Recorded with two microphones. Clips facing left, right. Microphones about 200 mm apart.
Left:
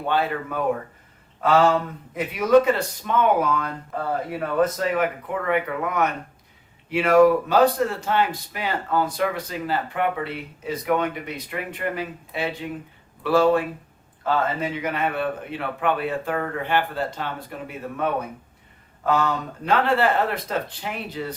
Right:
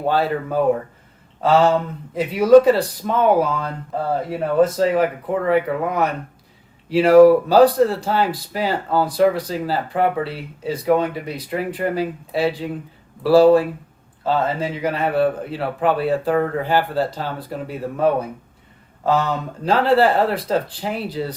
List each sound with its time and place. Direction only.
0.0 s speech: 35° right (ahead or behind)
2.1 s speech: 30° right (ahead or behind)